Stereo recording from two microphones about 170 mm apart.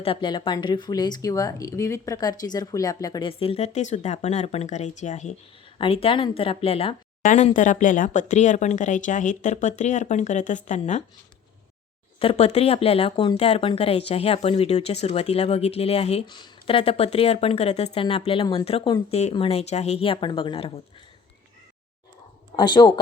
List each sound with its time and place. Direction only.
0.0 s speech: 30° left (ahead or behind); by 5.3 s 45° left (ahead or behind)
5.7 s speech: 35° left (ahead or behind)
7.2 s speech: 45° left (ahead or behind)
12.2 s speech: 35° left (ahead or behind)
22.5 s speech: 25° left (ahead or behind)